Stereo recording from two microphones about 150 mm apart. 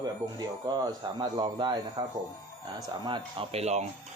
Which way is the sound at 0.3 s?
30° right (ahead or behind).